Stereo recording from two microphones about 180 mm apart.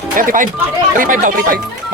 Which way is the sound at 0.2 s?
50° right (ahead or behind).